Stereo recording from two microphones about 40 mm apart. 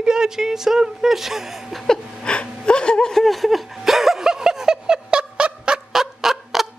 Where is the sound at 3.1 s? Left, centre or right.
Centre; by 5.8 s right.